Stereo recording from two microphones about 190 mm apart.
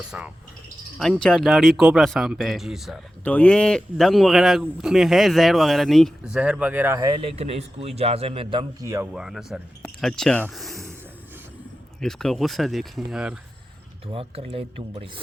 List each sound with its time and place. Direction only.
0.1 s speech: 5° right (ahead or behind); by 8.9 s 25° right (ahead or behind)
9.1 s speech: 5° right (ahead or behind)
11.9 s speech: centre (ahead or behind)
14.1 s speech: 30° right (ahead or behind)